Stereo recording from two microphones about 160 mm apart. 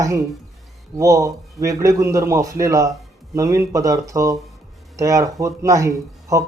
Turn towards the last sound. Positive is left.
turn(degrees=-20)  # may be behind; listen again after turning